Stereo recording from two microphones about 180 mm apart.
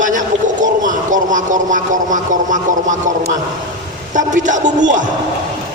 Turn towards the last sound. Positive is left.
turn(degrees=-45)  # may be behind; listen again after turning